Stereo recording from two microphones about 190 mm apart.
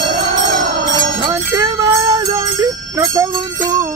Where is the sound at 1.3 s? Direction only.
15° right (ahead or behind).